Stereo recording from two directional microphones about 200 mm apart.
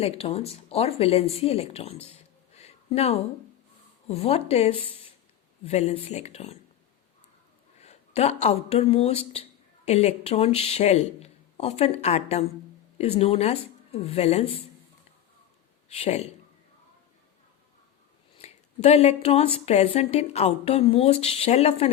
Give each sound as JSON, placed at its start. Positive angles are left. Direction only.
{"t": 0.0, "sound": "speech", "side_deg": 30}
{"t": 2.1, "sound": "a sound", "side_deg": 30}
{"t": 4.1, "sound": "speech", "side_deg": 30}
{"t": 7.8, "sound": "speech", "side_deg": 30}
{"t": 15.9, "sound": "speech", "side_deg": 30}
{"t": 18.3, "sound": "speech", "side_deg": 35}